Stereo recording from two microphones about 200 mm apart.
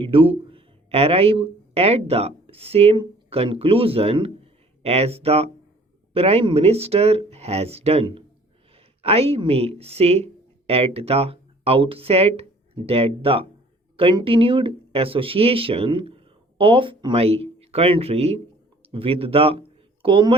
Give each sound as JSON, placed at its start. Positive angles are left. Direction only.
{"t": 0.0, "sound": "speech", "side_deg": -25}